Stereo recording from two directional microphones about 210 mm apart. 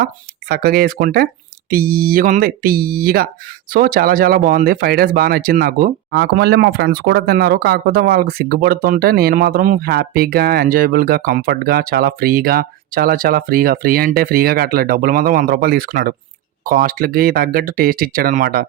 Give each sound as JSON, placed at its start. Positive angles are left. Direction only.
{"t": 0.0, "sound": "speech", "side_deg": -45}